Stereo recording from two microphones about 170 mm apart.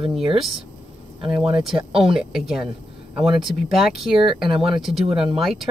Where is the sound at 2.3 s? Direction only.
Centre (ahead or behind).